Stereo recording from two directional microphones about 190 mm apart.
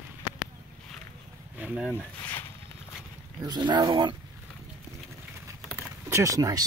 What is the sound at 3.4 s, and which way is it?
Speech, 20° right (ahead or behind).